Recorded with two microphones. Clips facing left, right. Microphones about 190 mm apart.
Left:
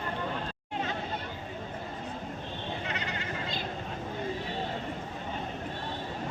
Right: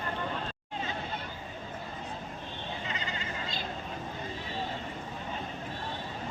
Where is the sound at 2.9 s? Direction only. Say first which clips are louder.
Left 2 dB; 65° left (ahead or behind).